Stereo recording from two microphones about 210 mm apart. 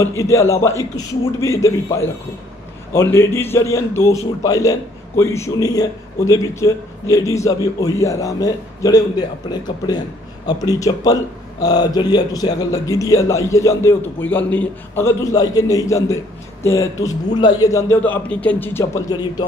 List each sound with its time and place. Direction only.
0.2 s a man's voice: 15° left (ahead or behind)